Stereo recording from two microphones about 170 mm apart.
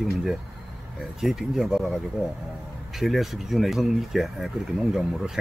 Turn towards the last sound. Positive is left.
turn(degrees=0)  # may be behind; listen again after turning